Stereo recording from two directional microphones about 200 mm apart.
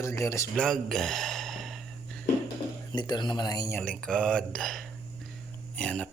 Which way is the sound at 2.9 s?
20° left (ahead or behind).